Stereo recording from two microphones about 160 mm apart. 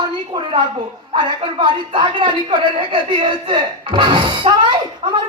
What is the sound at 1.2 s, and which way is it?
Speech, 30° right (ahead or behind).